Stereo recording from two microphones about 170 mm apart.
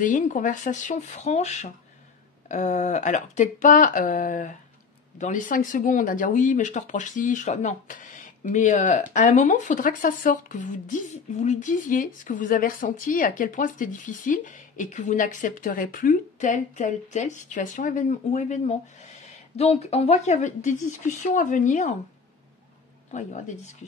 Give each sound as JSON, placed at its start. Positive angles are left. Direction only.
{"t": 0.0, "sound": "speech", "side_deg": 50}
{"t": 23.1, "sound": "speech", "side_deg": 45}